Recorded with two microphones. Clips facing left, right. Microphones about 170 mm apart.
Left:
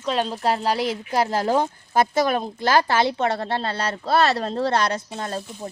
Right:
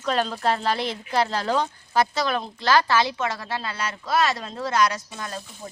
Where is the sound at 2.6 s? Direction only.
20° left (ahead or behind).